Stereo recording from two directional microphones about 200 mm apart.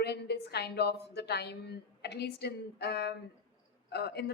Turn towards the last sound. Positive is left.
turn(degrees=55)  # may be behind; listen again after turning